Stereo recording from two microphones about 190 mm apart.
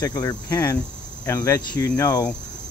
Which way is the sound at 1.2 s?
15° left (ahead or behind).